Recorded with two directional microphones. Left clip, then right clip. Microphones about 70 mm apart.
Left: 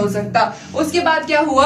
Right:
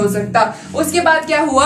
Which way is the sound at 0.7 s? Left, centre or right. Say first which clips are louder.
Right 3 dB; right.